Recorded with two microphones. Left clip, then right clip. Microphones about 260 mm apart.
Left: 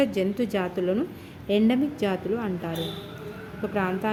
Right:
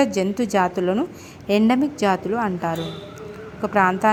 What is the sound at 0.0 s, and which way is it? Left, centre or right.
A woman's voice, centre.